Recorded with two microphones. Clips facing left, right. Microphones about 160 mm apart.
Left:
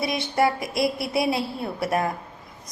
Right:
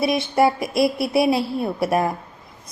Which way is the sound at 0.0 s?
25° right (ahead or behind).